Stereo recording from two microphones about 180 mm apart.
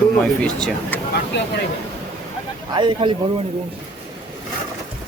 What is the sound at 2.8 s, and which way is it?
Speech, 25° right (ahead or behind).